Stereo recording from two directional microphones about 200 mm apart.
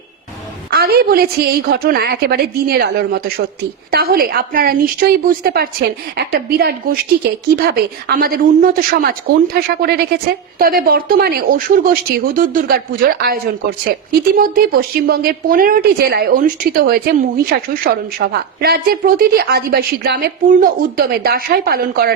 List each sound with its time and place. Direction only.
0.7 s speech: 50° right (ahead or behind)